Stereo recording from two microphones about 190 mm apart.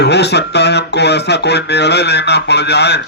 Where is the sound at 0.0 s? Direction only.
60° left (ahead or behind).